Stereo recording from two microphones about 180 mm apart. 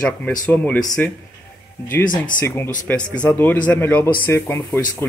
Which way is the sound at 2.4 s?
15° left (ahead or behind).